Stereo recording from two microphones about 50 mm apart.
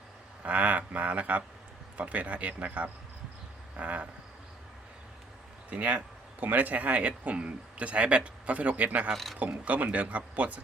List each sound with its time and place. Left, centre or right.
0.4 s speech: right
5.7 s speech: right
9.1 s speech: centre
9.4 s speech: right